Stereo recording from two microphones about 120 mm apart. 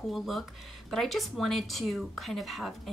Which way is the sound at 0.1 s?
Centre (ahead or behind).